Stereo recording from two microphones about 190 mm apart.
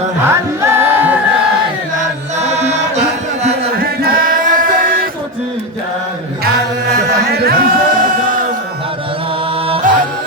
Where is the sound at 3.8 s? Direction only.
50° right (ahead or behind).